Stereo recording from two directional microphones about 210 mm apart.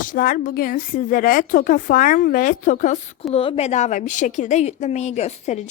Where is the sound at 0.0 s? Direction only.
40° left (ahead or behind).